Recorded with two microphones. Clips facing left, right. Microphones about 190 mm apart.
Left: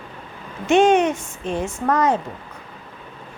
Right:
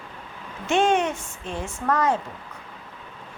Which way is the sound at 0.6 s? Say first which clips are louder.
Left 6 dB; 20° left (ahead or behind).